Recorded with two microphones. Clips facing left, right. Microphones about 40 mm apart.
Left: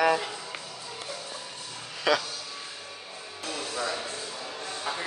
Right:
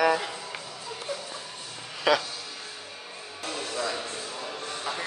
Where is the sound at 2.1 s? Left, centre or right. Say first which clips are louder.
Right 2 dB; centre.